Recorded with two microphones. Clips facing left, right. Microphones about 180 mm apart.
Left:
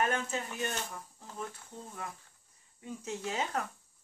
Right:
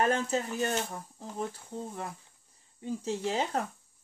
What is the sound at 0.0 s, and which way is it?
Speech, 35° right (ahead or behind).